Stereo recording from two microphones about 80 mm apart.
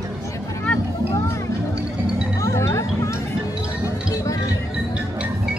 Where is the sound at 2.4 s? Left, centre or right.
Left.